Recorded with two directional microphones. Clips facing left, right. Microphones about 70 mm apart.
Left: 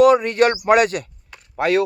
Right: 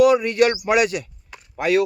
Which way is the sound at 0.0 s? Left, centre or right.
Left.